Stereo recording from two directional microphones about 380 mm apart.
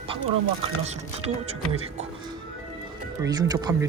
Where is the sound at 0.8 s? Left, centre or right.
Centre.